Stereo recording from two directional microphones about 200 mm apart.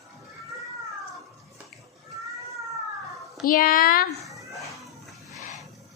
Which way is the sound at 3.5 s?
45° left (ahead or behind).